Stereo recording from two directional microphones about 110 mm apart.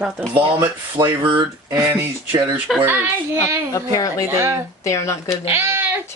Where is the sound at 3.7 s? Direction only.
30° left (ahead or behind).